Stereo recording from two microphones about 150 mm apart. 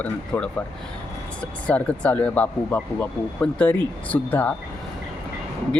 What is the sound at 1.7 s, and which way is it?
Speech, 10° left (ahead or behind).